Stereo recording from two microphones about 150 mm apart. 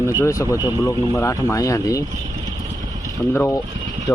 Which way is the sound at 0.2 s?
20° left (ahead or behind).